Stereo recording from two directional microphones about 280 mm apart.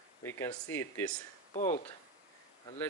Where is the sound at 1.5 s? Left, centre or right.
Left.